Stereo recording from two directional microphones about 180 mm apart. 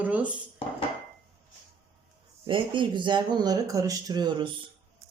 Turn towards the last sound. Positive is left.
turn(degrees=-25)  # may be behind; listen again after turning